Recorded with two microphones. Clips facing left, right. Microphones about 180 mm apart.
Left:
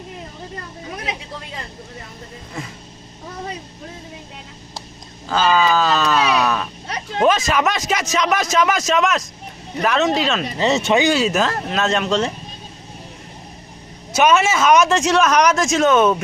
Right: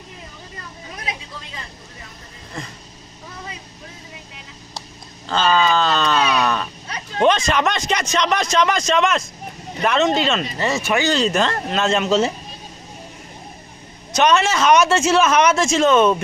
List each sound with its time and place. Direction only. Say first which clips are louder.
2.6 s vehicle: left 1 dB; 5° left (ahead or behind)
5.3 s a sound: left 1 dB; 5° left (ahead or behind)
7.2 s speech: even; 5° left (ahead or behind)
10.6 s speech: left 6 dB; 20° left (ahead or behind)
11.1 s speech: left 1 dB; 5° left (ahead or behind)
14.1 s speech: left 1 dB; 5° left (ahead or behind)